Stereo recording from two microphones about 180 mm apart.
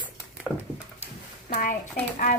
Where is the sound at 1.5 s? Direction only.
50° left (ahead or behind).